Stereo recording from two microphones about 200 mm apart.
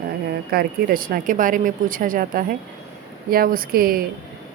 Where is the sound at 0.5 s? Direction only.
45° right (ahead or behind).